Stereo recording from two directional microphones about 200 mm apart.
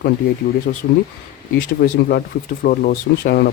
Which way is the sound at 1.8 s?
50° left (ahead or behind).